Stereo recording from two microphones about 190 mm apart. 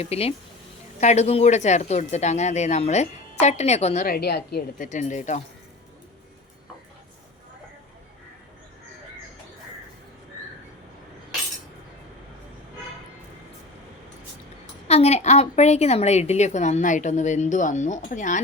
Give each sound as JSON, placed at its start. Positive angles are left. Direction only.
{"t": 0.0, "sound": "a woman's voice", "side_deg": 30}
{"t": 4.0, "sound": "a woman's voice", "side_deg": 55}
{"t": 4.9, "sound": "a woman's voice", "side_deg": 40}
{"t": 14.8, "sound": "a woman's voice", "side_deg": 35}